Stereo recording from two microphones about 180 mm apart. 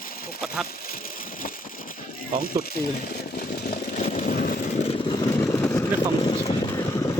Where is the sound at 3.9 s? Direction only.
40° left (ahead or behind).